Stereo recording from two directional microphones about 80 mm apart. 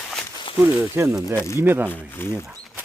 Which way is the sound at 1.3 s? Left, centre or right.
Left.